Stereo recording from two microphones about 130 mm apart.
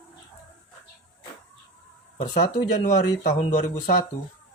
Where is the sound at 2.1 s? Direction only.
70° left (ahead or behind).